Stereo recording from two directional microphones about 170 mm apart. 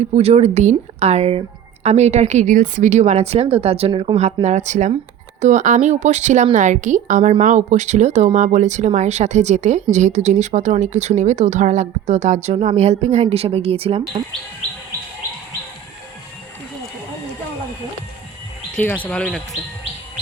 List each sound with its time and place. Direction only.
0.0 s a woman's voice: 40° right (ahead or behind)
18.8 s speech: 10° left (ahead or behind)